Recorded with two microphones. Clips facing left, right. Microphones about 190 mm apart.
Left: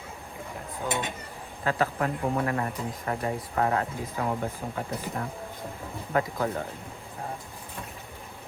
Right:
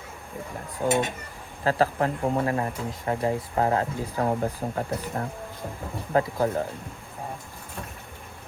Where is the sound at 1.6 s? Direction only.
35° right (ahead or behind).